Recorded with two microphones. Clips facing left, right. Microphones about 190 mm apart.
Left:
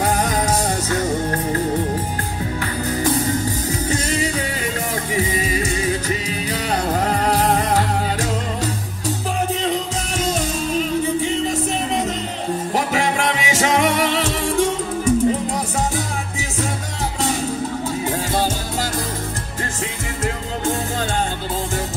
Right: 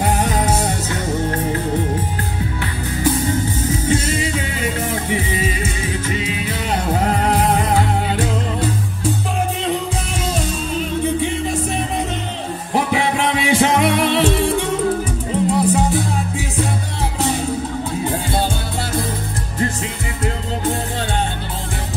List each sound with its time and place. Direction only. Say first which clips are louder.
0.0 s music: right 1 dB; 40° left (ahead or behind)
5.1 s music: left 3 dB; 40° left (ahead or behind)
8.2 s music: right 2 dB; 40° left (ahead or behind)
13.4 s music: right 4 dB; 45° left (ahead or behind)
15.0 s music: left 2 dB; 40° left (ahead or behind)